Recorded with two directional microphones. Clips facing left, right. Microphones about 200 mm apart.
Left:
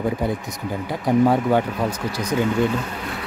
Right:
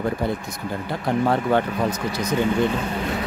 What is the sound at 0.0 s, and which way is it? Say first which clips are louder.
Speech: left 1 dB; 10° left (ahead or behind).